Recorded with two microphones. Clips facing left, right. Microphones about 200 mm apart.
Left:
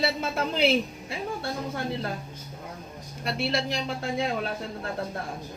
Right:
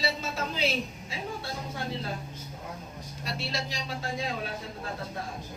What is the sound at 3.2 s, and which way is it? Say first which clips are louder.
Speech: left 7 dB; 60° left (ahead or behind).